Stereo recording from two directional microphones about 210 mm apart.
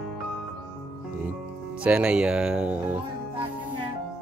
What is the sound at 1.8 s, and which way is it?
Speech, 5° right (ahead or behind).